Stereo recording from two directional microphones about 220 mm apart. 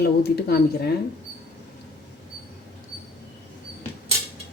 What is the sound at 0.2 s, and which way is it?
Speech, 45° left (ahead or behind).